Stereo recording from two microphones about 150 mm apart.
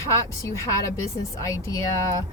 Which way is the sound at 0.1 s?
20° left (ahead or behind).